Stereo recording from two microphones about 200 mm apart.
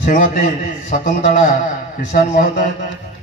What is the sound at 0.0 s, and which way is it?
A man's voice, 35° left (ahead or behind).